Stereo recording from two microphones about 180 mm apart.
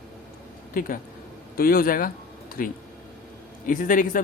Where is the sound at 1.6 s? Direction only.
55° left (ahead or behind).